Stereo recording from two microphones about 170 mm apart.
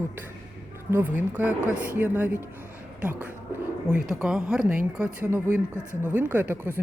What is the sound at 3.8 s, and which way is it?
Speech, 5° right (ahead or behind).